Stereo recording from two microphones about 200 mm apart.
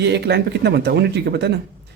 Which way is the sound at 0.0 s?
55° right (ahead or behind).